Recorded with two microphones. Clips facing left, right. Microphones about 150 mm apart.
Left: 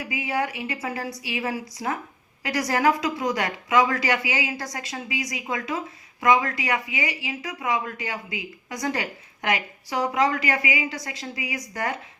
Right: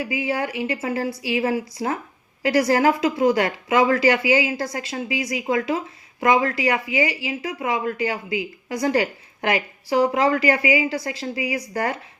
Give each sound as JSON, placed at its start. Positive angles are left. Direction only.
{"t": 0.0, "sound": "speech", "side_deg": -30}